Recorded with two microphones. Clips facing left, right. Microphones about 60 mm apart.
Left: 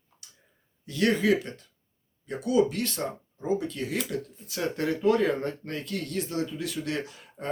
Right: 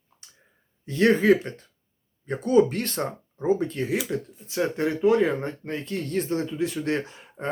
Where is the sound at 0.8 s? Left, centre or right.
Right.